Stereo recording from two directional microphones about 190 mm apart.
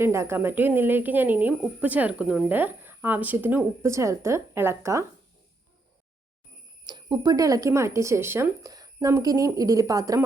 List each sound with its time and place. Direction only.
0.0 s a woman's voice: 15° right (ahead or behind)
6.8 s a woman's voice: 20° right (ahead or behind)